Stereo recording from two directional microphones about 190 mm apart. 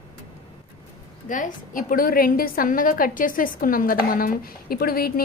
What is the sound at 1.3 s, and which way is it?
A woman's voice, 45° left (ahead or behind).